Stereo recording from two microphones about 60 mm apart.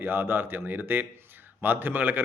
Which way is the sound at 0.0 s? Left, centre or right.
Right.